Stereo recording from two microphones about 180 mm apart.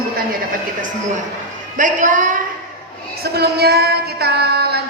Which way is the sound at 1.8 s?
45° right (ahead or behind).